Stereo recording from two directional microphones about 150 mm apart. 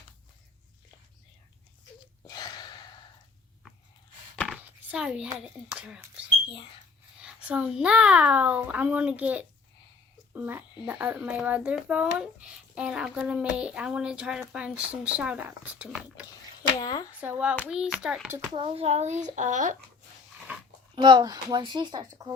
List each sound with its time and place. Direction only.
2.2 s gasp: 30° left (ahead or behind)
4.4 s a sound: 5° right (ahead or behind)
5.4 s speech: 5° right (ahead or behind)
16.8 s speech: 25° left (ahead or behind)
17.1 s speech: 10° right (ahead or behind)
18.5 s a child's voice: 40° right (ahead or behind); by 19.7 s 55° right (ahead or behind)
20.5 s chewing: 10° right (ahead or behind)
20.9 s speech: 30° right (ahead or behind)